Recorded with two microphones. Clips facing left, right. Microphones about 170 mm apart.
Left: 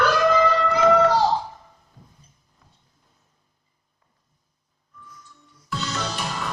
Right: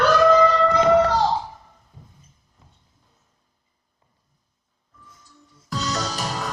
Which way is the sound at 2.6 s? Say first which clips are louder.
Right 2 dB; 20° right (ahead or behind).